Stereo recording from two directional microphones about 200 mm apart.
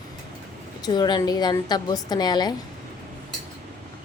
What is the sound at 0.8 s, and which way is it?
A woman's voice, 20° left (ahead or behind).